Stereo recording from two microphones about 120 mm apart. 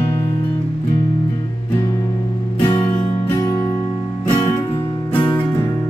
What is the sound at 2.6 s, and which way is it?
Music, 40° left (ahead or behind).